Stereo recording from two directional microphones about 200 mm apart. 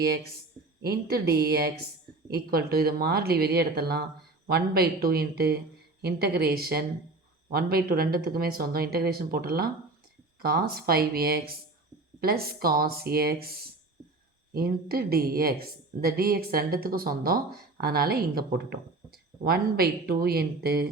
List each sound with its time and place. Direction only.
0.8 s a woman's voice: 50° right (ahead or behind)